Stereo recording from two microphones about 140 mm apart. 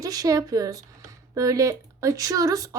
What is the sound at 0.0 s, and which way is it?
Speech, 25° right (ahead or behind).